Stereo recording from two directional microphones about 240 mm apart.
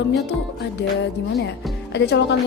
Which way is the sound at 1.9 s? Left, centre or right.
Left.